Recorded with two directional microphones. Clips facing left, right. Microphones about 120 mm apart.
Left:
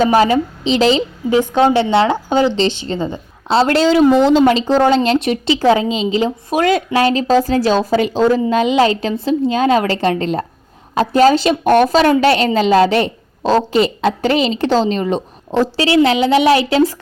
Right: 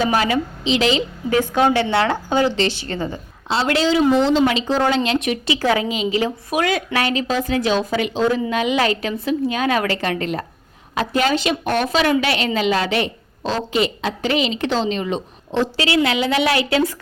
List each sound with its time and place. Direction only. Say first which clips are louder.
0.0 s a woman's voice: left 6 dB; 35° left (ahead or behind)
3.5 s speech: left 6 dB; 40° left (ahead or behind)
4.4 s a woman's voice: left 6 dB; 40° left (ahead or behind)